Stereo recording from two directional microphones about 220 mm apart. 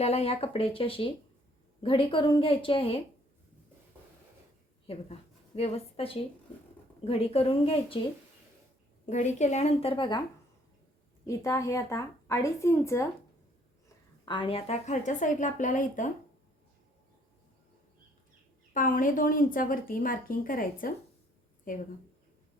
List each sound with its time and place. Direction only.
0.0 s a woman's voice: 30° left (ahead or behind)
4.9 s a woman's voice: 25° left (ahead or behind)
9.0 s a woman's voice: 35° left (ahead or behind)
11.3 s a woman's voice: 15° left (ahead or behind)
14.3 s a woman's voice: 20° left (ahead or behind)
18.7 s a woman's voice: 40° left (ahead or behind)